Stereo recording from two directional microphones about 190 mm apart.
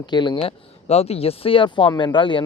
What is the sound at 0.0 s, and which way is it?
Speech, 25° left (ahead or behind).